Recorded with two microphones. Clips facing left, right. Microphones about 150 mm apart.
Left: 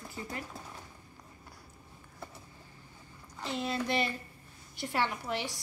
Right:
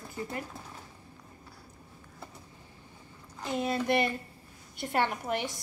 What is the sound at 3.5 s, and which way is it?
A woman's voice, 50° right (ahead or behind).